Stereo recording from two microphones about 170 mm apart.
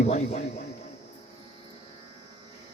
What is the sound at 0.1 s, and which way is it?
Speech, 40° left (ahead or behind).